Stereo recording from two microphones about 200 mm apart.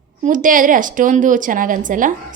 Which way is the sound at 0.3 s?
40° right (ahead or behind).